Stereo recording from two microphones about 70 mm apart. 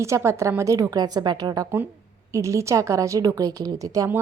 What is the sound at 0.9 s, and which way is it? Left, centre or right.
Speech, right.